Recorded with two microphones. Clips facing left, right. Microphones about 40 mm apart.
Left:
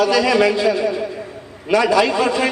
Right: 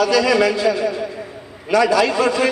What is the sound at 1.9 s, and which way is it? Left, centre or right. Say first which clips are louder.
Speech: left 1 dB; left.